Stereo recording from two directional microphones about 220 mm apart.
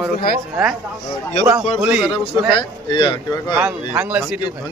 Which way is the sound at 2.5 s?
20° left (ahead or behind).